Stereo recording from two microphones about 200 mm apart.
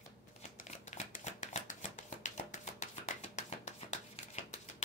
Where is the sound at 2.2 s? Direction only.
35° left (ahead or behind).